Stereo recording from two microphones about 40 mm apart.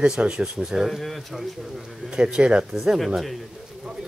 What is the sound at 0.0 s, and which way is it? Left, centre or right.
Speech, right.